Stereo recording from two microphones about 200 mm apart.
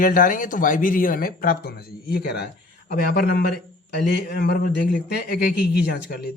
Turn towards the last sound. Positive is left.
turn(degrees=55)  # may be behind; listen again after turning